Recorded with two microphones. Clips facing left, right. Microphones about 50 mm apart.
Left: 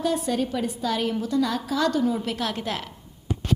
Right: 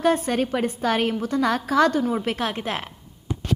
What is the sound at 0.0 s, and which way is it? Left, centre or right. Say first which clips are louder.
A woman's voice: right 4 dB; right.